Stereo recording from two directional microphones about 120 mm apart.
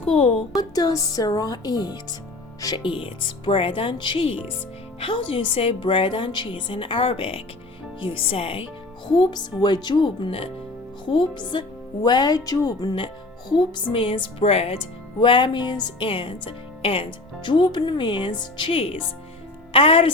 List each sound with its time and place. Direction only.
0.1 s a woman's voice: 55° left (ahead or behind)
0.5 s speech: 30° left (ahead or behind)
2.8 s speech: 45° left (ahead or behind)
9.0 s speech: 40° left (ahead or behind); by 14.8 s 55° left (ahead or behind)
15.2 s speech: 45° left (ahead or behind)